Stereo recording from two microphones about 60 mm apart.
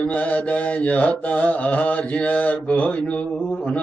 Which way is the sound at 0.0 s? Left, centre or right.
Left.